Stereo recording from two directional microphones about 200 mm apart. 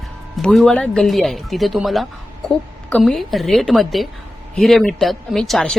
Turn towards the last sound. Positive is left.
turn(degrees=0)  # may be behind; listen again after turning